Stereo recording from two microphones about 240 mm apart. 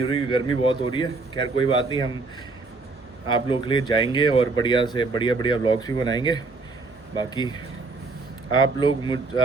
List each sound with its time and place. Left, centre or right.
0.0 s a man's voice: left
3.2 s a man's voice: left